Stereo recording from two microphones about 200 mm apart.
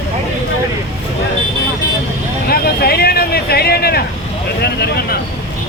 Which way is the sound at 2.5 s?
50° left (ahead or behind).